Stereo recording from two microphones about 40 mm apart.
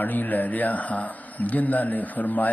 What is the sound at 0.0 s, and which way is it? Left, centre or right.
Speech, left.